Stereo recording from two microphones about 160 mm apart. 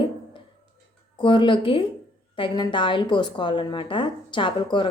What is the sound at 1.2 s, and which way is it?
A woman's voice, 30° left (ahead or behind).